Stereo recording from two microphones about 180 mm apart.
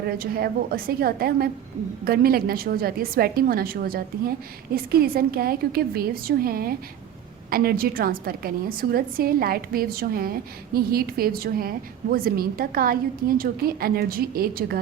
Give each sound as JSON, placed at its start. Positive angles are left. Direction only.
{"t": 0.2, "sound": "a woman's voice", "side_deg": -55}